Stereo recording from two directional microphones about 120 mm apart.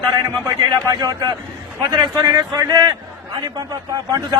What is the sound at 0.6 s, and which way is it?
A man's voice, 35° right (ahead or behind).